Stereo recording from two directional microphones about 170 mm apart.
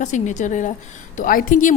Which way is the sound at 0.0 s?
45° left (ahead or behind).